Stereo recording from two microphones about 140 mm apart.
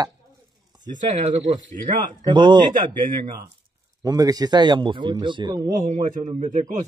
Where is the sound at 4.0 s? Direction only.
25° right (ahead or behind).